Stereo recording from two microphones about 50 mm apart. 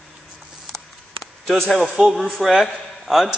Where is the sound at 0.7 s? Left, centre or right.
Centre.